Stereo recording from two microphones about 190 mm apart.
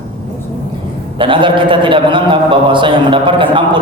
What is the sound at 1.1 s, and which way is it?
A man's voice, 25° right (ahead or behind).